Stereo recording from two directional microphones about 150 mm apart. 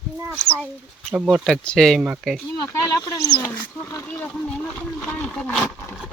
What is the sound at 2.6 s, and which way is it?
Speech, 25° left (ahead or behind).